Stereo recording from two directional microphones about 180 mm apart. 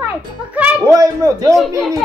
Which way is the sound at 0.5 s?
10° right (ahead or behind).